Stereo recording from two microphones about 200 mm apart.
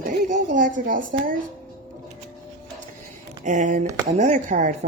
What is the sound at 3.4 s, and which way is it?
Speech, 40° right (ahead or behind).